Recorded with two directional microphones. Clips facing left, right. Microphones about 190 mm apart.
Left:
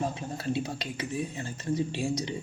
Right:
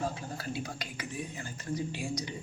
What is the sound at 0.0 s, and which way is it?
Speech, 25° left (ahead or behind).